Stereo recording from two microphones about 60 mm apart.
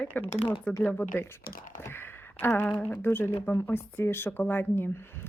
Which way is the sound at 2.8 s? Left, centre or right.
Left.